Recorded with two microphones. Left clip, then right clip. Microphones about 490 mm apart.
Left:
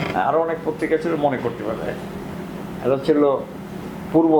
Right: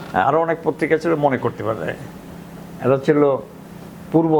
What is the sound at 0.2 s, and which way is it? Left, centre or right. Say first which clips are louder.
Speech: right 3 dB; right.